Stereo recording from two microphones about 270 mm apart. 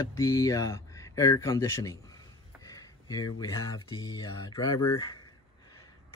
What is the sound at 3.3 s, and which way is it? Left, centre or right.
Speech, centre.